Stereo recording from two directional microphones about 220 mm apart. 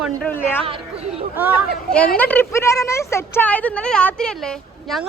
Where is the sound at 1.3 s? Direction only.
10° right (ahead or behind).